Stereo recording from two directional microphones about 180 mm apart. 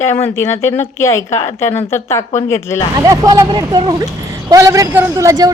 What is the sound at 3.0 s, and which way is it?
A man's voice, 20° right (ahead or behind).